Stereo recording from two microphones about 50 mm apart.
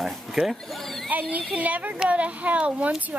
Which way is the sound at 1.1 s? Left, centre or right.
Right.